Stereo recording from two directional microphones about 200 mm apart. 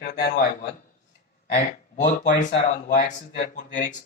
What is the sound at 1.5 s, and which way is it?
Speech, 40° left (ahead or behind).